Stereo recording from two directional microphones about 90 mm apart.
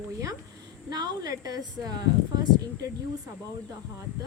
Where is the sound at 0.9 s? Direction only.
45° right (ahead or behind).